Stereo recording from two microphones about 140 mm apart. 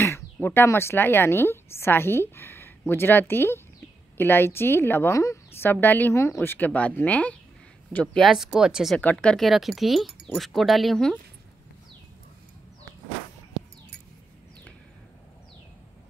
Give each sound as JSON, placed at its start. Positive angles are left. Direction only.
{"t": 0.0, "sound": "a woman's voice", "side_deg": 15}
{"t": 8.9, "sound": "speech", "side_deg": 5}